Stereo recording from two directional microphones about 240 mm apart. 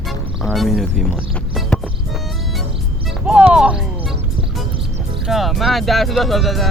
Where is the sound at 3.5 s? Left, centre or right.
Centre.